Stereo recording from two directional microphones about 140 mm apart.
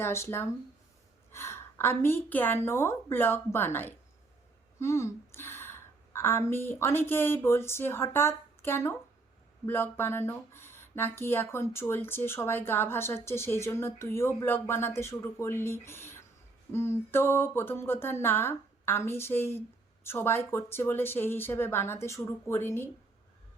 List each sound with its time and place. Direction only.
0.0 s speech: 20° left (ahead or behind)